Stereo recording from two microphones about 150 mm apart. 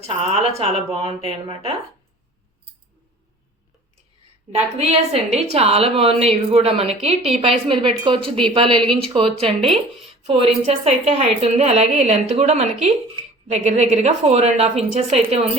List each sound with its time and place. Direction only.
0.3 s a woman's voice: 40° right (ahead or behind)
4.5 s a woman's voice: 45° right (ahead or behind)